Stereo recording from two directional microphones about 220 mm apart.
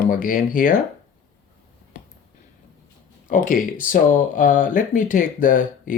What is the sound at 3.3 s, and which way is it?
Speech, 35° left (ahead or behind).